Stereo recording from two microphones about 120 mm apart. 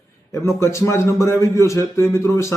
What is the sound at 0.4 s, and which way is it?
Speech, 25° left (ahead or behind).